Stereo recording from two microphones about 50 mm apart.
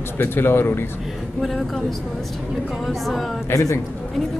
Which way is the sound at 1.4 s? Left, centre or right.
Centre.